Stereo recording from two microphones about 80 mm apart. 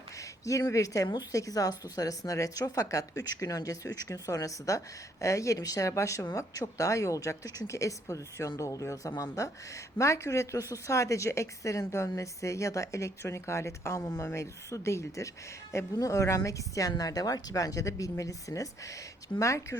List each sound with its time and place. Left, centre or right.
0.2 s a woman's voice: left